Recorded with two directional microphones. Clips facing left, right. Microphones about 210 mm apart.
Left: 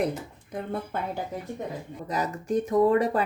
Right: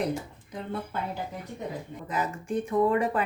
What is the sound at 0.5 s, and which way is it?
Speech, 55° left (ahead or behind).